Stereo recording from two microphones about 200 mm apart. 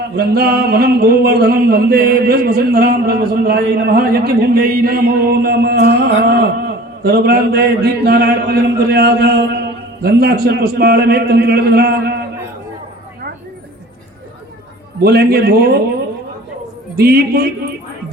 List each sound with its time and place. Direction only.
0.2 s a man's voice: 50° right (ahead or behind)
15.0 s a man's voice: 50° right (ahead or behind)
17.0 s a man's voice: 50° right (ahead or behind)